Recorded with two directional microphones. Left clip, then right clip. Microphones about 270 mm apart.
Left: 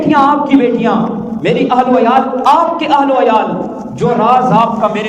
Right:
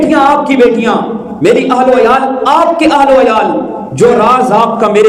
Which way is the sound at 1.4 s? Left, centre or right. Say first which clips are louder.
Right 6 dB; right.